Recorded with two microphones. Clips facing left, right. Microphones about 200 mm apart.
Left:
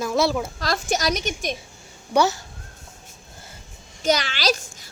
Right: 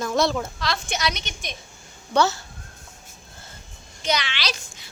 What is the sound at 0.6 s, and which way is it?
Speech, 40° left (ahead or behind).